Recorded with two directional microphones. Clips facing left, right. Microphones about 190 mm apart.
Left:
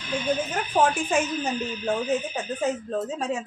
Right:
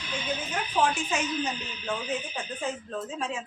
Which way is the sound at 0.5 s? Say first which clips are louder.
Left 1 dB; 50° left (ahead or behind).